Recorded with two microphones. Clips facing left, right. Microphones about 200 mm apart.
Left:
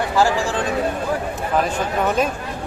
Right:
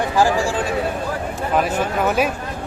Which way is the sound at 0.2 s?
15° right (ahead or behind).